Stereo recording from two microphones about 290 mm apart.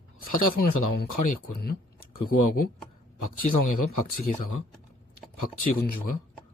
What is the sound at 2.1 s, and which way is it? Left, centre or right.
Speech, left.